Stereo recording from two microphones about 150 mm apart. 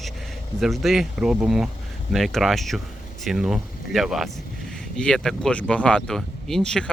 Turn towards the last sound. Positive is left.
turn(degrees=5)  # may be behind; listen again after turning